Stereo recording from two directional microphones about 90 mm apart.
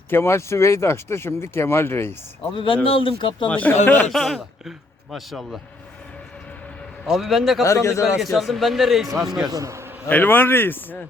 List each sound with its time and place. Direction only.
0.1 s speech: 30° left (ahead or behind)
2.8 s speech: 90° left; by 3.5 s 70° left (ahead or behind)
3.5 s speech: 20° left (ahead or behind)
4.1 s speech: 5° left (ahead or behind)
7.1 s speech: centre (ahead or behind)
7.6 s a man's voice: 35° left (ahead or behind)
8.0 s speech: centre (ahead or behind)
9.5 s a man's voice: 35° right (ahead or behind)
10.1 s speech: 20° left (ahead or behind)